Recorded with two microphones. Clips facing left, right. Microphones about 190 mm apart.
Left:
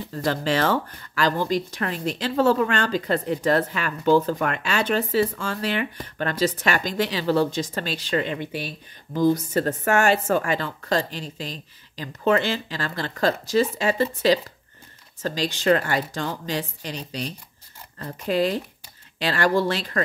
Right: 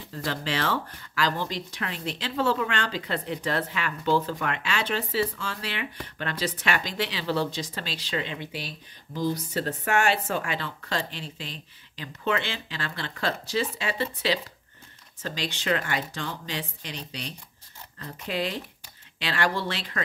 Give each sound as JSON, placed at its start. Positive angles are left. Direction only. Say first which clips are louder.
{"t": 0.1, "sound": "speech", "louder": "left 7 dB", "side_deg": 45}